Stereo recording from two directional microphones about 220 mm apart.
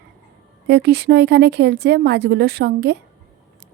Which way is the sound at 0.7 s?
50° right (ahead or behind).